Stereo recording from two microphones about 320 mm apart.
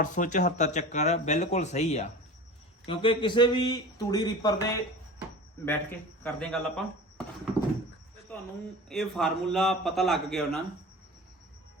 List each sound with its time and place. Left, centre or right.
0.0 s a man's voice: left
5.6 s a man's voice: centre
7.2 s horse: centre
8.3 s a sound: centre
8.9 s a man's voice: centre